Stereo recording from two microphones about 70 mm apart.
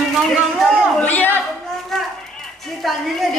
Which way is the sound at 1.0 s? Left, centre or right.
Left.